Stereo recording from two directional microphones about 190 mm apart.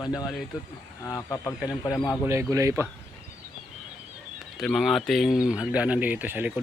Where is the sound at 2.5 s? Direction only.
15° right (ahead or behind).